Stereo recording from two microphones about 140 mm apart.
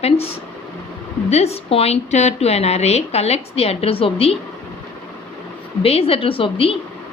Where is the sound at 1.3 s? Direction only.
50° left (ahead or behind).